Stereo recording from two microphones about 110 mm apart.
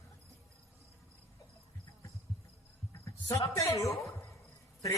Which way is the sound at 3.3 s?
30° left (ahead or behind).